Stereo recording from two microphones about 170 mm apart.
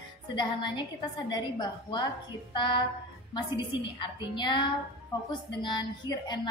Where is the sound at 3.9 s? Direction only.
25° left (ahead or behind).